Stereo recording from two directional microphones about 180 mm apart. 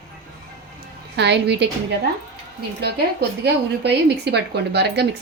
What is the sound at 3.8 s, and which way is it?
A woman's voice, 65° right (ahead or behind).